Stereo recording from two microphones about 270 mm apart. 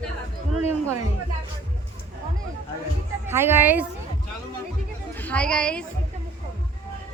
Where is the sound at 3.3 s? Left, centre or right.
Centre.